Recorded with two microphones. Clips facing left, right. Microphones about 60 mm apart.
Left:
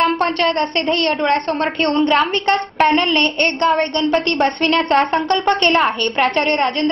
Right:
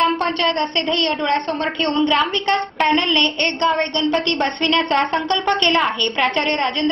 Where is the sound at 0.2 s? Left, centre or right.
Left.